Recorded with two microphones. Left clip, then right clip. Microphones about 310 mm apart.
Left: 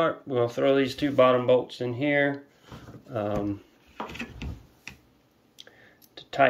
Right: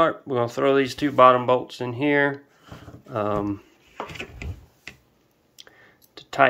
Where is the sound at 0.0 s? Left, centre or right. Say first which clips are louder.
Right 4 dB; centre.